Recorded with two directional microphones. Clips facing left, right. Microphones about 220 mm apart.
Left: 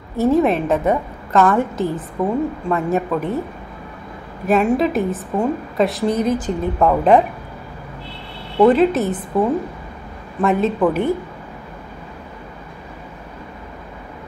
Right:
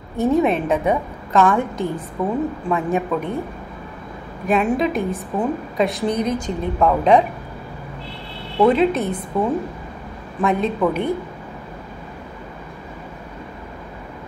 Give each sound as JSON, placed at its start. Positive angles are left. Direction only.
{"t": 0.2, "sound": "a woman's voice", "side_deg": 0}
{"t": 4.5, "sound": "a woman's voice", "side_deg": 0}
{"t": 8.6, "sound": "a woman's voice", "side_deg": 0}